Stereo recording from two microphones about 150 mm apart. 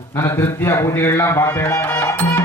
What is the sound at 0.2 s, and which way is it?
Music, 15° left (ahead or behind).